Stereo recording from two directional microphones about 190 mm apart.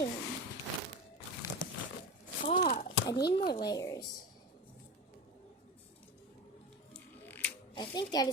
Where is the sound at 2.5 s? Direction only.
30° left (ahead or behind).